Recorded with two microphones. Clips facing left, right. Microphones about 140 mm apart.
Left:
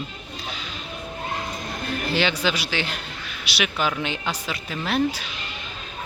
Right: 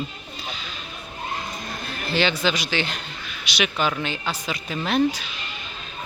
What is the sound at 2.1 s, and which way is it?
Speech, 10° left (ahead or behind).